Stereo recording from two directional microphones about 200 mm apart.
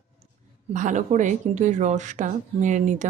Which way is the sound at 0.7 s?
40° right (ahead or behind).